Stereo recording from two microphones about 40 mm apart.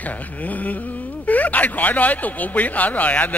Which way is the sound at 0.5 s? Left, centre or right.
Left.